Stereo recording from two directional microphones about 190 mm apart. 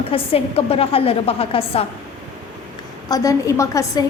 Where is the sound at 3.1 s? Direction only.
15° left (ahead or behind).